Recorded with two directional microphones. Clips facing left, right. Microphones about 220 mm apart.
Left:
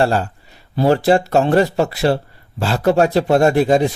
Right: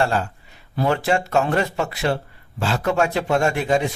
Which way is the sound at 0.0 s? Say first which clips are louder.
Left 5 dB; 35° left (ahead or behind).